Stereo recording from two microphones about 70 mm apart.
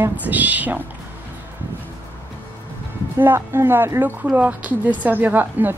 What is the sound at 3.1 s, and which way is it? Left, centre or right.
A woman's voice, right.